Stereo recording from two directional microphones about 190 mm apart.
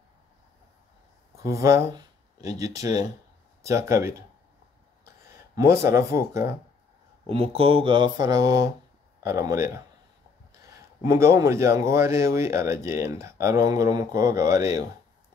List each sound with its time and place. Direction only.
1.3 s speech: 15° right (ahead or behind)
5.6 s speech: 15° right (ahead or behind)
7.2 s speech: 30° right (ahead or behind)